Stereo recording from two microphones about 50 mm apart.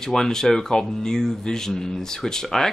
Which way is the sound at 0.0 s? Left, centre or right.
Centre.